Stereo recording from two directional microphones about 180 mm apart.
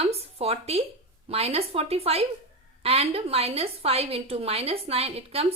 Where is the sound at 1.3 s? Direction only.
35° right (ahead or behind).